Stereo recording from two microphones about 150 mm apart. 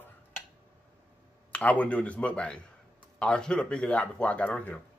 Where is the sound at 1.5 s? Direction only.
10° left (ahead or behind).